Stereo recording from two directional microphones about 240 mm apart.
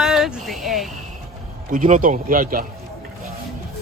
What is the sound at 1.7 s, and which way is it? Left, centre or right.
Speech, right.